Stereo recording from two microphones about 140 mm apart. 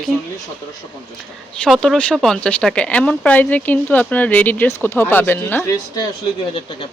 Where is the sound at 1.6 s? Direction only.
5° left (ahead or behind); by 6.1 s 25° left (ahead or behind).